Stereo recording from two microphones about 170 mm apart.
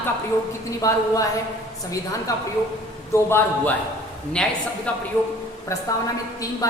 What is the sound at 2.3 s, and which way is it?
A man's voice, 20° left (ahead or behind).